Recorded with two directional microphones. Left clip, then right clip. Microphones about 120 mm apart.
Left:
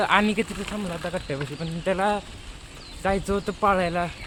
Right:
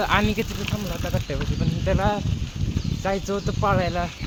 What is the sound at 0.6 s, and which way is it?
Speech, 30° left (ahead or behind).